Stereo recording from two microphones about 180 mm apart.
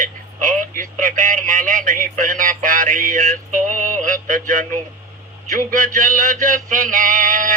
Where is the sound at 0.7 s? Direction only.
50° right (ahead or behind).